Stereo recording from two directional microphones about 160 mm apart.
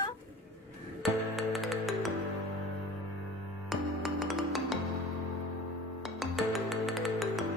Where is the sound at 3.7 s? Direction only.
Centre (ahead or behind).